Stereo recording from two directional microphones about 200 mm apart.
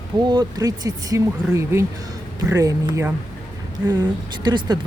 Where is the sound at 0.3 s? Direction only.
20° right (ahead or behind).